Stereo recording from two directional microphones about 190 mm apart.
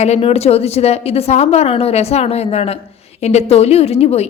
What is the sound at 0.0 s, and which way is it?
A woman's voice, 35° left (ahead or behind).